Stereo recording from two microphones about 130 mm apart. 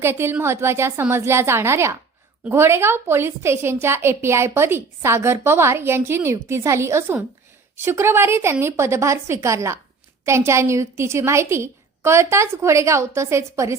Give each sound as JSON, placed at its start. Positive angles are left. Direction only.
{"t": 0.0, "sound": "a woman's voice", "side_deg": -20}